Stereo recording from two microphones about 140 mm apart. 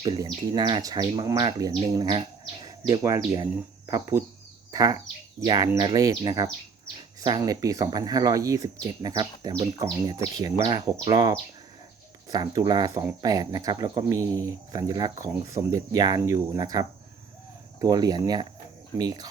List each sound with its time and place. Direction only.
0.2 s speech: 30° right (ahead or behind)
12.3 s speech: 30° right (ahead or behind)